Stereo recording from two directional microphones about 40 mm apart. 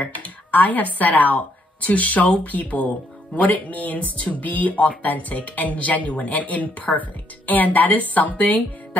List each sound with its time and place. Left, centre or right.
0.0 s a woman's voice: left